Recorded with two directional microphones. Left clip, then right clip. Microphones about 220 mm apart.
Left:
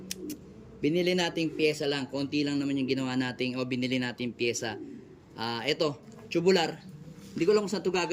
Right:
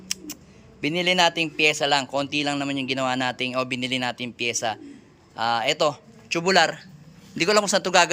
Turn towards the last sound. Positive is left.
turn(degrees=-40)  # may be behind; listen again after turning